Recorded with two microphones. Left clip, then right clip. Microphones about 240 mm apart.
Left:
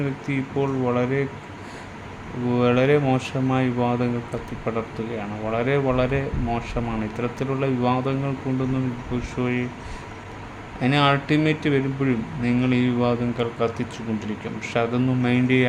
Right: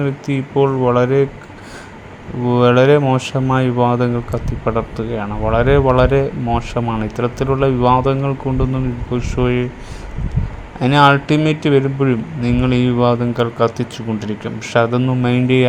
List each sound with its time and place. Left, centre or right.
0.0 s speech: right
2.5 s speech: right
10.8 s speech: right